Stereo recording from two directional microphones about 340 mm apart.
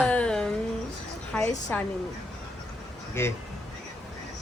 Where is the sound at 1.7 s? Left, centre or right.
Centre.